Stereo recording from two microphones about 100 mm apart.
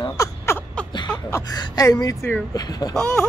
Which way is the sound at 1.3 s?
35° left (ahead or behind).